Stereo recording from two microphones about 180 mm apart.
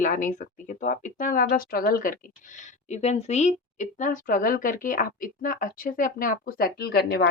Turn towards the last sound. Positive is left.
turn(degrees=60)  # may be behind; listen again after turning